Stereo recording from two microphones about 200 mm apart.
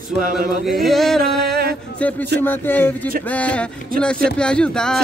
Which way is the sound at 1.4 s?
50° right (ahead or behind).